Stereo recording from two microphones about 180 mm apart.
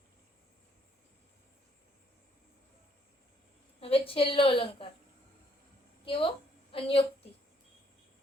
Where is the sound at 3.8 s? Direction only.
30° left (ahead or behind).